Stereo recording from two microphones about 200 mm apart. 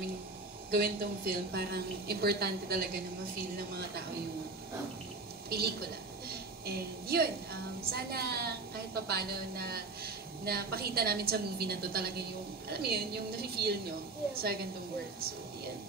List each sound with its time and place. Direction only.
0.7 s a woman's voice: 45° right (ahead or behind)
5.5 s a woman's voice: 50° right (ahead or behind)
6.2 s a sound: 50° right (ahead or behind)
7.9 s a woman's voice: 50° right (ahead or behind)